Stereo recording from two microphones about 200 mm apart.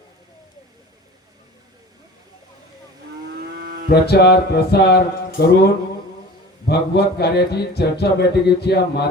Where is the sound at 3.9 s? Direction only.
55° left (ahead or behind).